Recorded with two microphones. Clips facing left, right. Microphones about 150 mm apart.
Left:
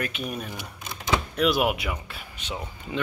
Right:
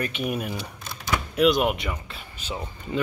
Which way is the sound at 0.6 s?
20° left (ahead or behind).